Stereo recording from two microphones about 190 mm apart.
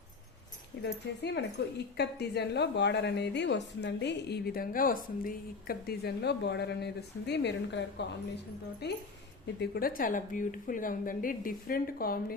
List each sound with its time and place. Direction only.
0.8 s a woman's voice: 65° left (ahead or behind)